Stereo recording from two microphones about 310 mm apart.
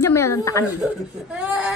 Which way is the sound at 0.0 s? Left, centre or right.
Centre.